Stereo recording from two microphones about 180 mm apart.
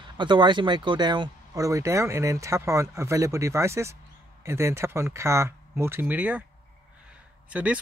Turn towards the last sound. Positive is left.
turn(degrees=-5)  # may be behind; listen again after turning